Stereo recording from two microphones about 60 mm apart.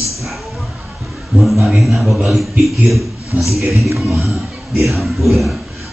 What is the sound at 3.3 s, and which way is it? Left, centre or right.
Speech, right.